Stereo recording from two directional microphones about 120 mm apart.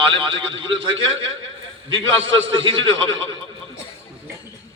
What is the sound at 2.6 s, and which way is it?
Speech, 45° right (ahead or behind).